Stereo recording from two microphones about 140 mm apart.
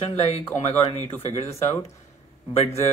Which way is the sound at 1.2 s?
50° left (ahead or behind).